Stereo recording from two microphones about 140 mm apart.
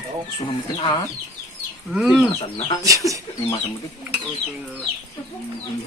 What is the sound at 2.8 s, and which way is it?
Speech, 25° right (ahead or behind).